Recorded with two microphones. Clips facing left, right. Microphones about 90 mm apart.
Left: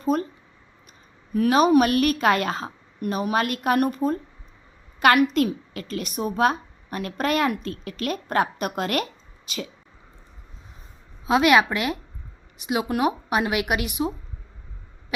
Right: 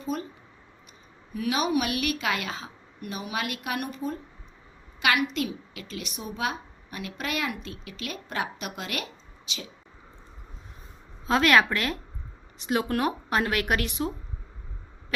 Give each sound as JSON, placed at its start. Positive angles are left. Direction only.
{"t": 0.0, "sound": "speech", "side_deg": 45}
{"t": 1.3, "sound": "a woman's voice", "side_deg": 45}
{"t": 11.3, "sound": "speech", "side_deg": 15}